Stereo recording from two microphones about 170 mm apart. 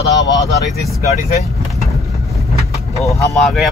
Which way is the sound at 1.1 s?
40° left (ahead or behind).